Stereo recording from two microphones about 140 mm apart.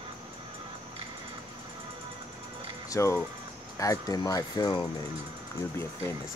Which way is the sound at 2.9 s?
20° left (ahead or behind).